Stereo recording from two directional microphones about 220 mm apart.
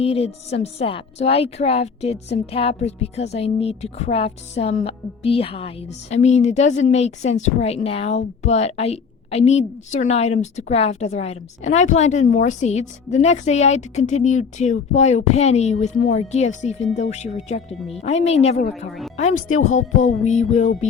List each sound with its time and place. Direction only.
0.0 s speech: 25° left (ahead or behind)
20.2 s speech: 30° left (ahead or behind)